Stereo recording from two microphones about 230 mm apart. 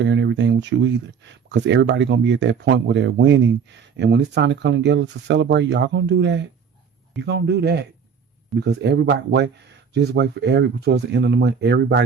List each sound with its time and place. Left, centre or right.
0.0 s speech: right